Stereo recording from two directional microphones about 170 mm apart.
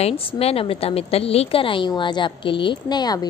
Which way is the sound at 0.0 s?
35° left (ahead or behind).